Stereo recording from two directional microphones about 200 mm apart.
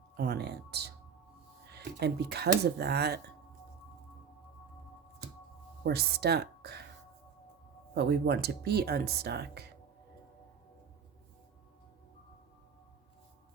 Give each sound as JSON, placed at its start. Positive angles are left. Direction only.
{"t": 0.2, "sound": "speech", "side_deg": -55}
{"t": 5.8, "sound": "speech", "side_deg": -55}
{"t": 7.9, "sound": "speech", "side_deg": -55}